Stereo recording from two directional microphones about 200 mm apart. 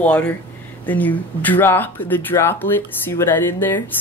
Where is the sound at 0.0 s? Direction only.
10° left (ahead or behind).